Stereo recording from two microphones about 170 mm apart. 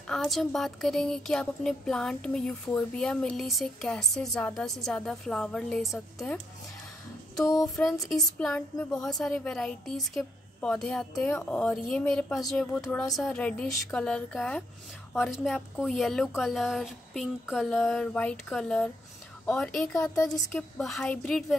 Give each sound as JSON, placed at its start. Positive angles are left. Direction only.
{"t": 0.0, "sound": "speech", "side_deg": 0}
{"t": 7.3, "sound": "a sound", "side_deg": 20}
{"t": 7.7, "sound": "a woman's voice", "side_deg": 0}